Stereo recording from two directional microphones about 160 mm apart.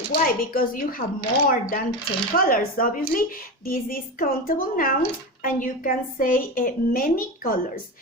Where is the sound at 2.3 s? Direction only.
65° left (ahead or behind).